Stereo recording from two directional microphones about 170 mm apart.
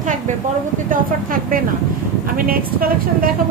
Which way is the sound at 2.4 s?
60° right (ahead or behind).